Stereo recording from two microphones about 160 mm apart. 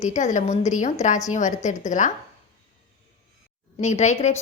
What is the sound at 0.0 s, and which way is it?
A woman's voice, 50° left (ahead or behind).